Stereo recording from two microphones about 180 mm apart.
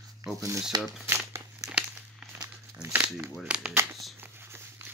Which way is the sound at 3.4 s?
5° right (ahead or behind).